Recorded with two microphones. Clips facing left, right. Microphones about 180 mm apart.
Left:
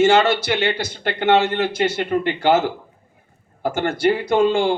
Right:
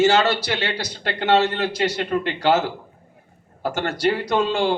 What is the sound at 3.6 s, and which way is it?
A man's voice, 50° left (ahead or behind).